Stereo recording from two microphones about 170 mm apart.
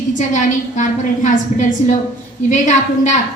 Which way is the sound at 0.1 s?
50° left (ahead or behind).